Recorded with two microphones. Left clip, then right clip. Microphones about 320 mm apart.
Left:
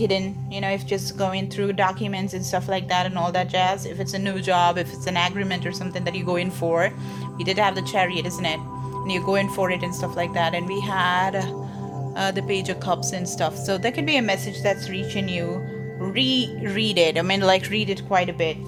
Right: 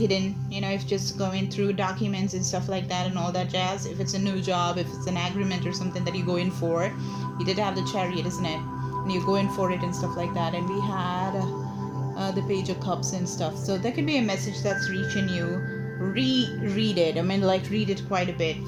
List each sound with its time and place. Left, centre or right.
0.0 s a woman's voice: left